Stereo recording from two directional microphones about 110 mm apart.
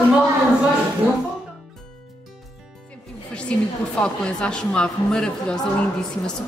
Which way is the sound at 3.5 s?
10° left (ahead or behind).